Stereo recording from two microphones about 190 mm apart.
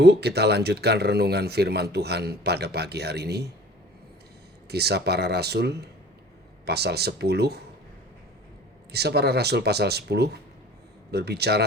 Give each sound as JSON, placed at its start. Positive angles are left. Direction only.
{"t": 0.0, "sound": "a man's voice", "side_deg": -60}
{"t": 4.7, "sound": "a man's voice", "side_deg": -60}
{"t": 8.9, "sound": "a man's voice", "side_deg": -60}